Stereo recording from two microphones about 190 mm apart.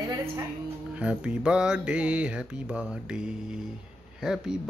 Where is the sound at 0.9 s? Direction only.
5° right (ahead or behind).